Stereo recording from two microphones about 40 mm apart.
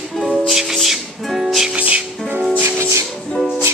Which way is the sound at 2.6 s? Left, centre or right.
Right.